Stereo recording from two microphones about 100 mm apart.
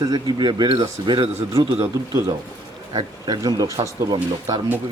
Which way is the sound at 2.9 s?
45° right (ahead or behind).